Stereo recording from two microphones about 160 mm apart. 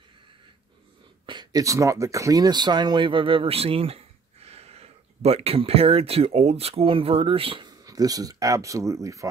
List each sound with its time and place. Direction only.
1.2 s speech: 30° right (ahead or behind)
7.8 s speech: 25° right (ahead or behind)